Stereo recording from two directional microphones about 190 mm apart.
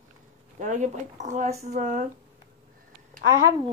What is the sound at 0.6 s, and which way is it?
Speech, 40° right (ahead or behind).